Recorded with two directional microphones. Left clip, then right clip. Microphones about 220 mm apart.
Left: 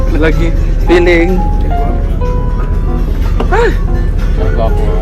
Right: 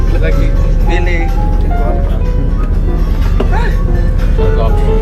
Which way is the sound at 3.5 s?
5° left (ahead or behind).